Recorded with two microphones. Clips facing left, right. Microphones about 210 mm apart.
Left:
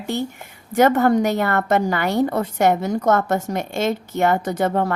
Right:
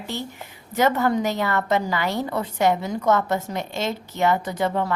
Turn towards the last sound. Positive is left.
turn(degrees=50)  # may be behind; listen again after turning